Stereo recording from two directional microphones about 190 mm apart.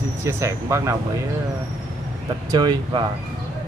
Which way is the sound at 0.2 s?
15° right (ahead or behind).